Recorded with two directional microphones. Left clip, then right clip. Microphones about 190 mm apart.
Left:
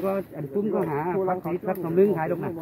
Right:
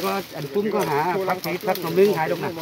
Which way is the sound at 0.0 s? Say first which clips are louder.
Right 2 dB; 30° right (ahead or behind).